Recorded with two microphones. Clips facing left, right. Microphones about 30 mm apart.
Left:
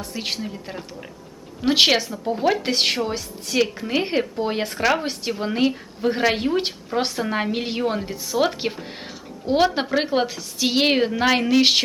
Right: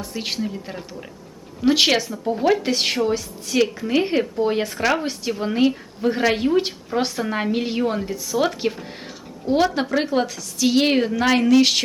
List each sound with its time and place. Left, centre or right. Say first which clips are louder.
0.0 s a woman's voice: right 2 dB; centre